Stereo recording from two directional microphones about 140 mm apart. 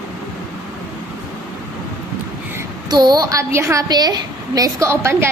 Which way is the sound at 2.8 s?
30° right (ahead or behind).